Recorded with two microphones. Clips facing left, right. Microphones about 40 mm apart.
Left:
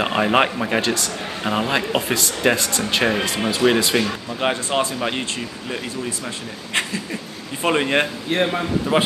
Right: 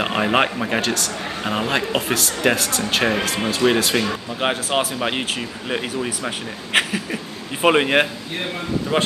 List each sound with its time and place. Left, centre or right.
0.0 s speech: centre
4.4 s speech: centre
6.7 s a sound: right
7.6 s speech: centre
8.9 s a man's voice: centre